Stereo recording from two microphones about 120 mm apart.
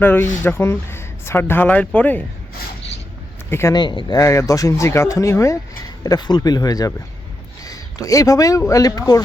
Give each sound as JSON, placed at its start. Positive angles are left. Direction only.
{"t": 0.0, "sound": "speech", "side_deg": 15}
{"t": 3.5, "sound": "speech", "side_deg": 20}
{"t": 3.8, "sound": "speech", "side_deg": 40}